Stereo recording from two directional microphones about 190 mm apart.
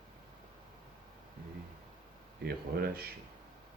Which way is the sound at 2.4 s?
55° right (ahead or behind).